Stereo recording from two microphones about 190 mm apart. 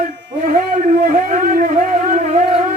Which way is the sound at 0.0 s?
45° right (ahead or behind).